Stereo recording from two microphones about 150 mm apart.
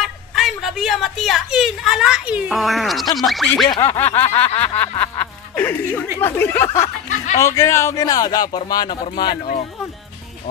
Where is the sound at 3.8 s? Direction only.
15° left (ahead or behind).